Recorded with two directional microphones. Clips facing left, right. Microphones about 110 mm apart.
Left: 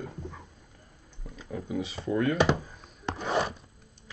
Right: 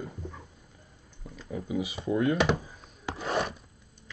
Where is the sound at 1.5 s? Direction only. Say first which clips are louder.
Right 1 dB; 5° right (ahead or behind).